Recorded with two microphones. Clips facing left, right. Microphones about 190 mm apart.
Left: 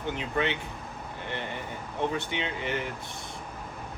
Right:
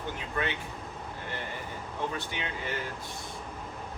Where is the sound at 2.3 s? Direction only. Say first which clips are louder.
Left 4 dB; 20° left (ahead or behind).